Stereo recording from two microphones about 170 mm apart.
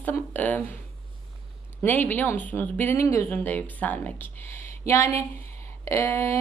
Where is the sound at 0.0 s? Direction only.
10° left (ahead or behind).